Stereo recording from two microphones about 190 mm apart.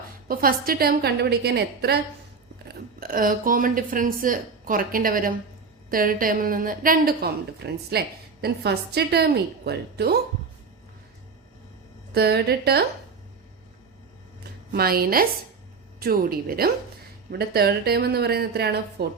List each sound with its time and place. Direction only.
0.3 s a woman's voice: 50° right (ahead or behind)
12.1 s a woman's voice: 60° right (ahead or behind)
14.7 s a woman's voice: 55° right (ahead or behind)